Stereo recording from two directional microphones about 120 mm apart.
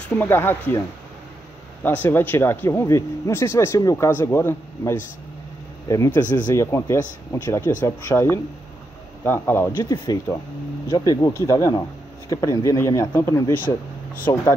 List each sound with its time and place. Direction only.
0.2 s speech: 20° left (ahead or behind)
9.8 s speech: 35° left (ahead or behind); by 13.7 s 15° left (ahead or behind)